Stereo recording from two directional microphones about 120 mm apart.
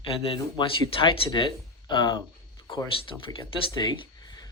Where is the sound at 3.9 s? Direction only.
35° left (ahead or behind).